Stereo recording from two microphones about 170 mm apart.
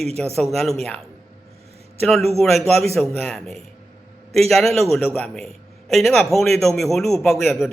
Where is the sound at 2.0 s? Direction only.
5° left (ahead or behind).